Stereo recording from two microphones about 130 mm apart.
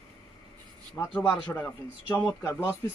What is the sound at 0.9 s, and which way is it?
A man's voice, 10° left (ahead or behind).